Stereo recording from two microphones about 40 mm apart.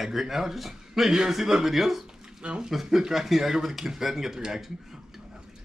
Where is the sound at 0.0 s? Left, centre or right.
Centre.